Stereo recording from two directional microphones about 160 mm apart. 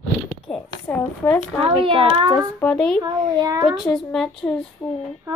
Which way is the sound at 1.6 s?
35° right (ahead or behind).